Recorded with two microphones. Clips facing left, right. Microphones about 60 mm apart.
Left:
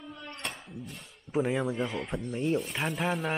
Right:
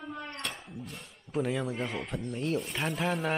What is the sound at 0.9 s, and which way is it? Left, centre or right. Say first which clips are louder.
Speech: left 3 dB; centre.